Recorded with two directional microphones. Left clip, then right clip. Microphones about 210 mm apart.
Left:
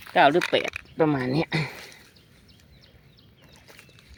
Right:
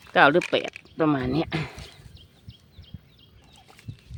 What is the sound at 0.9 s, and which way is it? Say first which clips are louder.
Speech: even; 5° right (ahead or behind).